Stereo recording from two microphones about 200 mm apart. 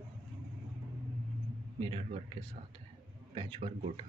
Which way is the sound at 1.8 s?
30° right (ahead or behind).